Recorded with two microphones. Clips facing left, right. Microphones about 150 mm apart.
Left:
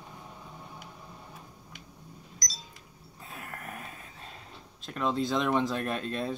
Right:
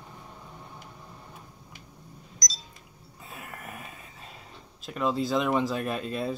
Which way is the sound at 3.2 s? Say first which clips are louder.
Even; centre (ahead or behind).